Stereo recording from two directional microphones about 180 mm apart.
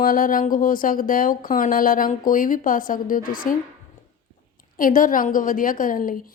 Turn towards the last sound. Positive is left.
turn(degrees=50)  # may be behind; listen again after turning